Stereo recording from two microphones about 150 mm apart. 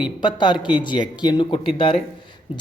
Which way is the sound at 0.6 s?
5° right (ahead or behind).